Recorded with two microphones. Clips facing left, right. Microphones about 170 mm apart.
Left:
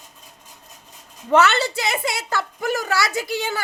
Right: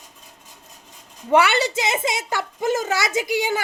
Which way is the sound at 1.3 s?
15° right (ahead or behind).